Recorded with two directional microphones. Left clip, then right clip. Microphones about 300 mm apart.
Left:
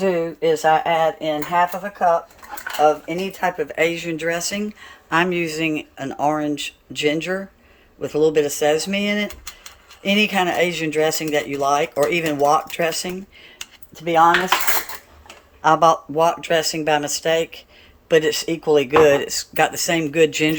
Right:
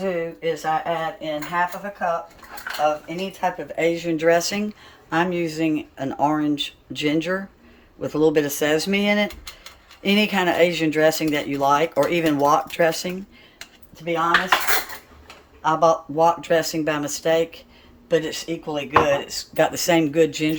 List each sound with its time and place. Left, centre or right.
0.0 s speech: centre
13.9 s speech: centre
15.6 s speech: centre
19.6 s speech: centre